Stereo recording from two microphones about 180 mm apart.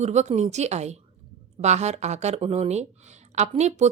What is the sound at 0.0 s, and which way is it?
A woman's voice, 40° right (ahead or behind).